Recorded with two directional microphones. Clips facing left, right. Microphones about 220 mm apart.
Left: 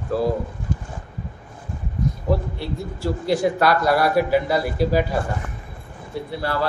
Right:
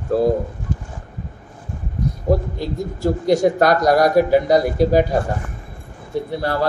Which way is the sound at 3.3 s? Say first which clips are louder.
Right 3 dB; 45° right (ahead or behind).